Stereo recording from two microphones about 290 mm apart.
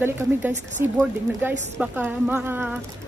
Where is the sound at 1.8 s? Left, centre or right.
Centre.